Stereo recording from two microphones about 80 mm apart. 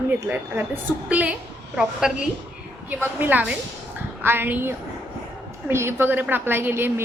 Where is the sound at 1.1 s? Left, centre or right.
Centre.